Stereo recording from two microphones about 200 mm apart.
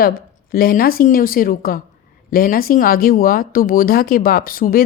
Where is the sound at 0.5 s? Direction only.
50° left (ahead or behind).